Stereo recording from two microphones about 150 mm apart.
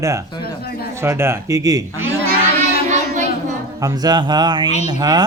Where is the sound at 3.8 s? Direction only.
25° right (ahead or behind).